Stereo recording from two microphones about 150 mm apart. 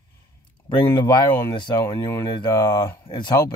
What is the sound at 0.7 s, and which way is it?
Speech, 30° left (ahead or behind).